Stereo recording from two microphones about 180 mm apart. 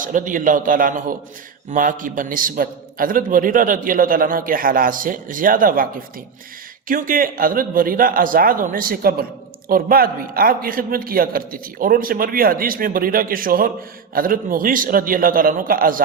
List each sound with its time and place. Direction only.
0.0 s a man's voice: 45° right (ahead or behind)